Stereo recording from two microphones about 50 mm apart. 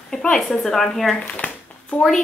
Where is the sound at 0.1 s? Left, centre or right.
Centre.